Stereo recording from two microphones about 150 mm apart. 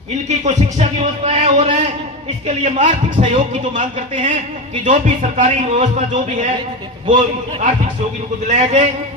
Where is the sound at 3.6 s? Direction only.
60° right (ahead or behind).